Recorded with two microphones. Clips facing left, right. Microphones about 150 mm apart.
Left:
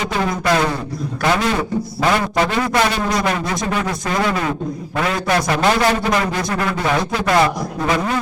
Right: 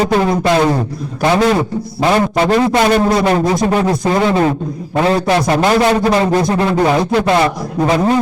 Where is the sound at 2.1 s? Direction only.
25° right (ahead or behind).